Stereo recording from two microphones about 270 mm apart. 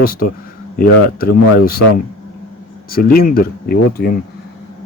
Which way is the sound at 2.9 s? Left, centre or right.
Left.